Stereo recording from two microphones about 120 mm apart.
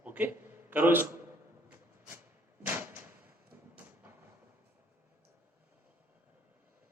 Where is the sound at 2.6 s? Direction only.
15° right (ahead or behind).